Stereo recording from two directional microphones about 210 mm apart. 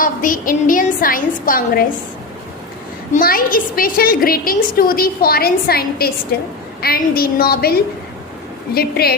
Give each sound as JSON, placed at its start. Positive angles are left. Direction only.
{"t": 0.0, "sound": "a woman's voice", "side_deg": 40}
{"t": 3.1, "sound": "a woman's voice", "side_deg": 45}